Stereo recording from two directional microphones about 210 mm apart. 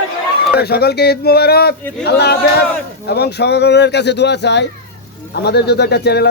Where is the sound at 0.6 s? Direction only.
50° left (ahead or behind).